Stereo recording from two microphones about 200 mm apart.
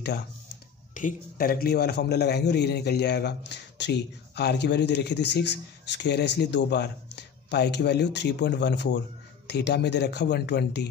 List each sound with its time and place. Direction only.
0.9 s a man's voice: 45° left (ahead or behind)